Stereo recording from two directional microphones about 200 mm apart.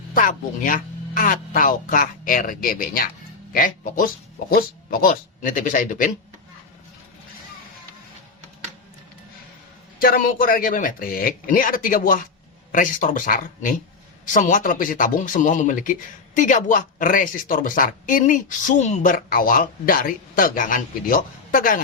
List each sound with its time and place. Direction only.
0.1 s speech: 45° left (ahead or behind)
10.0 s speech: 45° left (ahead or behind)